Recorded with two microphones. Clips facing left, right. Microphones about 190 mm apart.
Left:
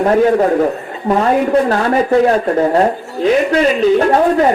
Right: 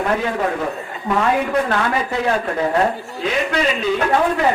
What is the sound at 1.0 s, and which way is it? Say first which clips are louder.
Speech: left 5 dB; 40° left (ahead or behind).